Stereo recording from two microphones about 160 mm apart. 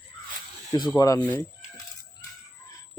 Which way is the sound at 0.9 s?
20° left (ahead or behind).